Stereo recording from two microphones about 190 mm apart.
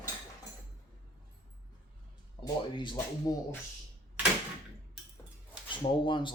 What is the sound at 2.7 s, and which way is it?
Speech, 25° left (ahead or behind).